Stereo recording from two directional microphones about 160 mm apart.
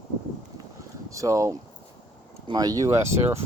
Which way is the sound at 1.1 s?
20° right (ahead or behind).